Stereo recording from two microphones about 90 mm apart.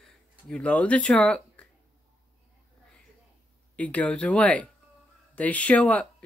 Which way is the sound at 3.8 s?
15° left (ahead or behind).